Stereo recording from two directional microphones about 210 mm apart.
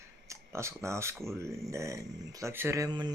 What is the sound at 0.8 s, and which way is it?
Speech, 15° right (ahead or behind).